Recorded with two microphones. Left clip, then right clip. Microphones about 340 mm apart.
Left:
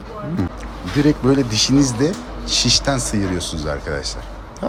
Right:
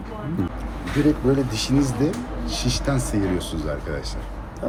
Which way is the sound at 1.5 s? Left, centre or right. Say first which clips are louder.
Left 6 dB; centre.